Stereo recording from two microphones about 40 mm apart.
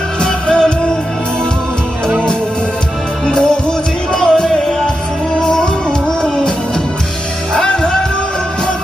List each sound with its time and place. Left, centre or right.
0.2 s music: left
3.2 s music: centre
7.5 s music: centre